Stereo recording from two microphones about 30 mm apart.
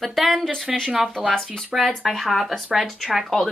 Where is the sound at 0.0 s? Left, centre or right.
Centre.